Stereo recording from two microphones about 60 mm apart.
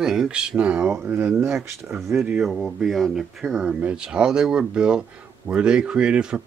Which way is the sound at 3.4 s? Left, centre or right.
Centre.